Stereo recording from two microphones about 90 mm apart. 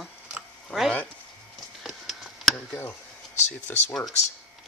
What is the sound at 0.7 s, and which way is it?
Speech, 10° left (ahead or behind).